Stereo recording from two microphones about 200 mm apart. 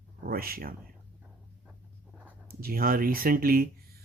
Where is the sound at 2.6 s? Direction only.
45° right (ahead or behind).